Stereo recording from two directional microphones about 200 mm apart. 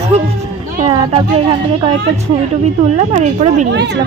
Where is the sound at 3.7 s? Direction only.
60° right (ahead or behind).